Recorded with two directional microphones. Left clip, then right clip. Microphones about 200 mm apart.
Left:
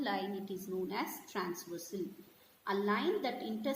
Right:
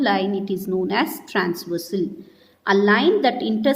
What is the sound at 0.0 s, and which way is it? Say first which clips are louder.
A woman's voice: right 17 dB; 40° right (ahead or behind).